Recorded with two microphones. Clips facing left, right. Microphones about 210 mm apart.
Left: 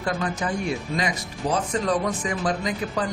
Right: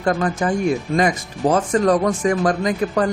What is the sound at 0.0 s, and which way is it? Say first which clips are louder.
Speech: right 7 dB; 50° right (ahead or behind).